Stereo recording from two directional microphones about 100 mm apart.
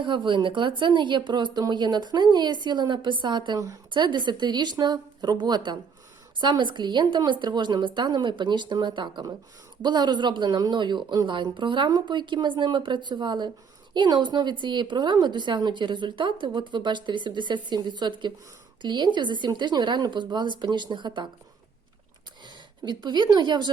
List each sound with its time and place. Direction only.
0.0 s a woman's voice: 55° right (ahead or behind)
22.4 s a woman's voice: 45° right (ahead or behind)